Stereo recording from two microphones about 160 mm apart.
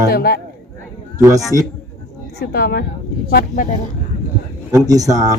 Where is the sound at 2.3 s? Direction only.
90° left.